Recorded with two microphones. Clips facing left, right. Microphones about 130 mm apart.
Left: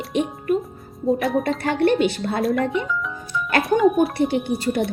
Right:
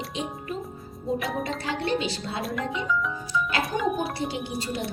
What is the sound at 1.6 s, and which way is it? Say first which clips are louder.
Speech: left 10 dB; 55° left (ahead or behind).